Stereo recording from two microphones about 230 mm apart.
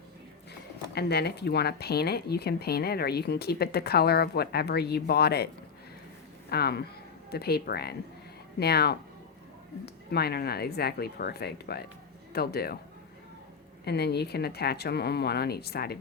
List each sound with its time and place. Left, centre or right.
0.9 s speech: left
6.5 s speech: left
10.1 s speech: left
13.8 s speech: left